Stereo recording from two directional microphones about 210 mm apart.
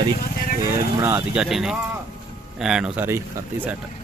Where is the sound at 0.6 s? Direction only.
10° right (ahead or behind).